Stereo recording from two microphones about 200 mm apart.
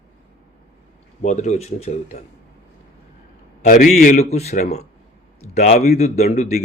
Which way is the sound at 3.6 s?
40° left (ahead or behind).